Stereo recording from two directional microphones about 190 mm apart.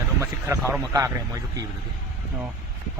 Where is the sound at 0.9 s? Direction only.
15° right (ahead or behind).